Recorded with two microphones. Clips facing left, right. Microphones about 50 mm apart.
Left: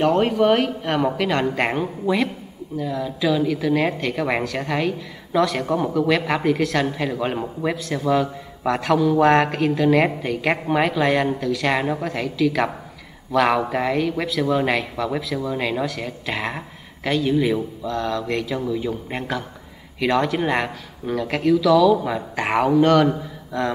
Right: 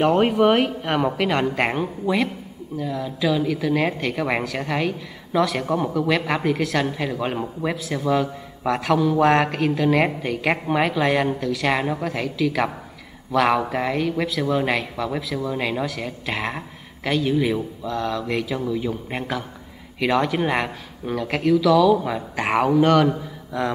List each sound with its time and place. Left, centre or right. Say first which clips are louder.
0.0 s speech: right 1 dB; centre